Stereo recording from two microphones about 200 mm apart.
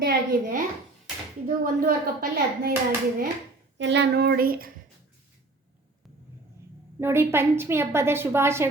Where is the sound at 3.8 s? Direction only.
60° right (ahead or behind).